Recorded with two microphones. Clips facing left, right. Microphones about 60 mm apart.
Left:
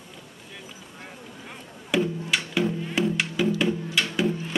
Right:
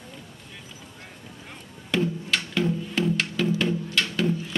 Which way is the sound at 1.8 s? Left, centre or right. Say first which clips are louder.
Left 1 dB; centre.